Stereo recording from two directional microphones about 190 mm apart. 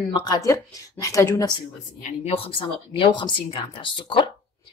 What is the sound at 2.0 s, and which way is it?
Speech, 30° left (ahead or behind).